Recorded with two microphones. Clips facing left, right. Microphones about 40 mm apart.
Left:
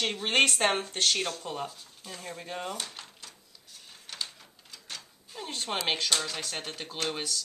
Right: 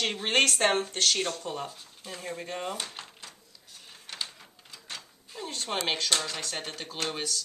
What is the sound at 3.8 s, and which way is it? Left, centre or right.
Printer, centre.